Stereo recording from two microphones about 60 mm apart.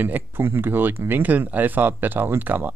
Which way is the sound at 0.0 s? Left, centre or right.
Right.